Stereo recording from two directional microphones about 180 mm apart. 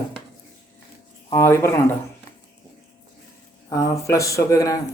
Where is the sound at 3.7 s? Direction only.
20° left (ahead or behind).